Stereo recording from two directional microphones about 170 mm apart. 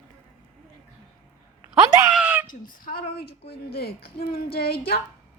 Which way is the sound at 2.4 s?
55° left (ahead or behind).